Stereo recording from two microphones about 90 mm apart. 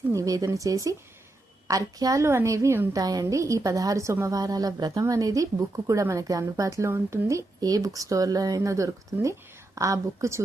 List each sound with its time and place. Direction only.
0.1 s a woman's voice: 40° right (ahead or behind)
2.2 s a woman's voice: 30° right (ahead or behind)